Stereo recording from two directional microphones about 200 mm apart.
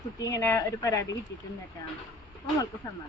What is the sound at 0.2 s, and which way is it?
Speech, 15° left (ahead or behind).